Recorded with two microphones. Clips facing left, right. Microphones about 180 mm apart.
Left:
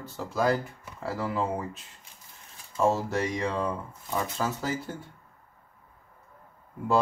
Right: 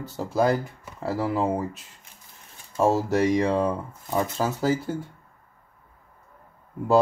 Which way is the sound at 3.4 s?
35° right (ahead or behind).